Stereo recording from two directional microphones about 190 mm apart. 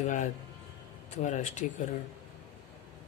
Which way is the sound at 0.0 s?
40° left (ahead or behind).